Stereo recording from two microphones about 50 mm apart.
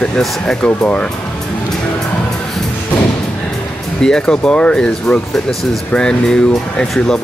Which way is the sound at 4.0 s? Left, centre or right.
Centre.